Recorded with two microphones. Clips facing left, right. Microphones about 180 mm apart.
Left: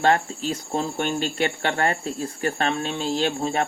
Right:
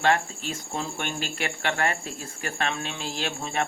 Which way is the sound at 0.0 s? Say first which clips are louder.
Left 3 dB; 35° left (ahead or behind).